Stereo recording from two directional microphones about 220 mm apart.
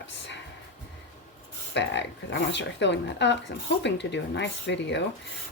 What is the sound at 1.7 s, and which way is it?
Speech, 55° left (ahead or behind).